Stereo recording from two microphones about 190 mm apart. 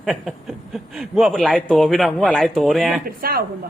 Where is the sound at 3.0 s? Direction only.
50° right (ahead or behind).